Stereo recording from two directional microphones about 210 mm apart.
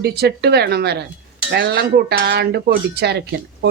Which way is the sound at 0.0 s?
50° right (ahead or behind).